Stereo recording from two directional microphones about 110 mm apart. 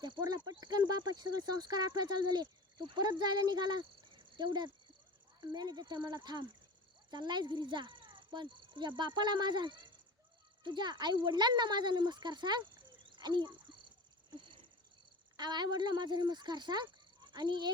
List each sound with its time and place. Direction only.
0.0 s speech: 40° right (ahead or behind)
4.2 s cricket: 45° right (ahead or behind)
5.4 s a child's voice: 40° right (ahead or behind)
14.3 s a sound: 45° right (ahead or behind)
15.4 s speech: 40° right (ahead or behind)